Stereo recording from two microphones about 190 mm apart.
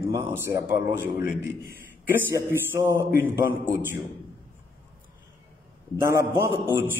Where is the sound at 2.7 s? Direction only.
10° right (ahead or behind).